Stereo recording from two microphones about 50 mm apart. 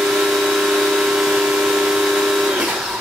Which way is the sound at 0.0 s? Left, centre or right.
Centre.